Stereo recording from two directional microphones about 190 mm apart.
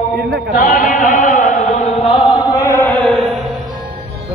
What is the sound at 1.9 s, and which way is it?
Chant, 30° left (ahead or behind).